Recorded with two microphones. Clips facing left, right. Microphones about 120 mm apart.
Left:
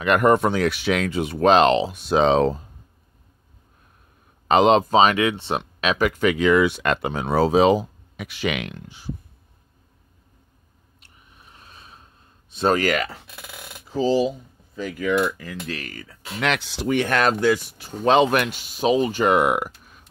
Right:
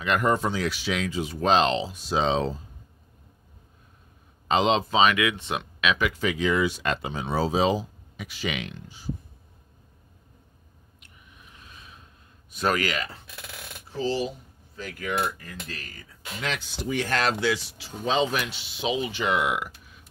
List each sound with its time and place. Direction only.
0.0 s speech: 60° left (ahead or behind)
4.5 s speech: 55° left (ahead or behind)
6.2 s speech: 65° left (ahead or behind)
11.0 s a sound: 35° left (ahead or behind)
12.8 s speech: 65° left (ahead or behind)
15.4 s speech: 90° left; by 20.1 s 45° left (ahead or behind)